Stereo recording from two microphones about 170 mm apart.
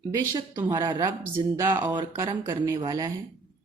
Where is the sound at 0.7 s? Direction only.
25° right (ahead or behind).